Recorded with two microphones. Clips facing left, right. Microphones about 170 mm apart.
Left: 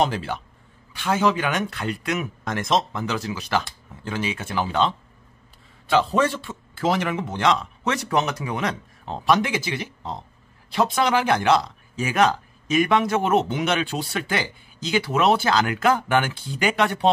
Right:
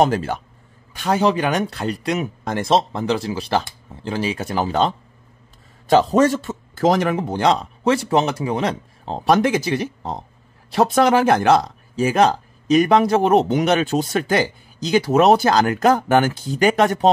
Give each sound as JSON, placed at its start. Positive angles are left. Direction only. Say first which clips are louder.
{"t": 0.0, "sound": "speech", "louder": "right 5 dB", "side_deg": -45}
{"t": 11.9, "sound": "speech", "louder": "right 4 dB", "side_deg": -35}